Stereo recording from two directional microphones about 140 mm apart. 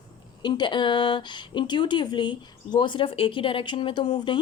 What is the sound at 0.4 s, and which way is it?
Speech, 35° left (ahead or behind).